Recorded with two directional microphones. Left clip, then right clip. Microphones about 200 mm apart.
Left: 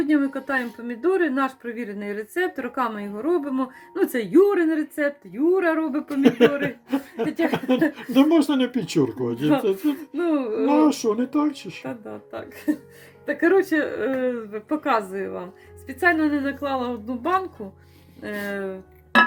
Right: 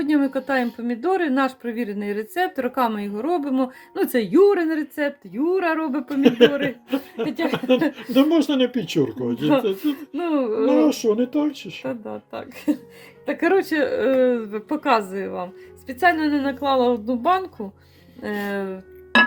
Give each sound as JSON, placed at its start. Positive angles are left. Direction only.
{"t": 0.1, "sound": "a woman's voice", "side_deg": -55}
{"t": 6.2, "sound": "speech", "side_deg": 0}
{"t": 10.2, "sound": "a woman's voice", "side_deg": -50}
{"t": 10.7, "sound": "speech", "side_deg": -10}
{"t": 11.9, "sound": "a woman's voice", "side_deg": -45}
{"t": 13.2, "sound": "a woman's voice", "side_deg": -60}